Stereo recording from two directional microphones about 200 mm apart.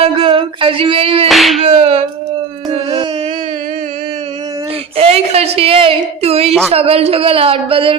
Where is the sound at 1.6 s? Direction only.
30° right (ahead or behind).